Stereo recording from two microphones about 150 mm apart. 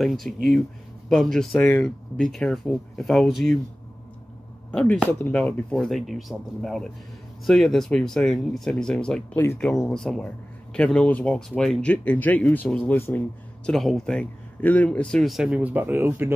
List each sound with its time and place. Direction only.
0.0 s speech: centre (ahead or behind)
4.6 s speech: 10° left (ahead or behind)
13.7 s speech: centre (ahead or behind); by 16.3 s 15° right (ahead or behind)